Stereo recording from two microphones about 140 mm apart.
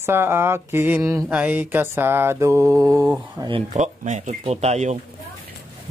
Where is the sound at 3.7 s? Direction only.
60° right (ahead or behind).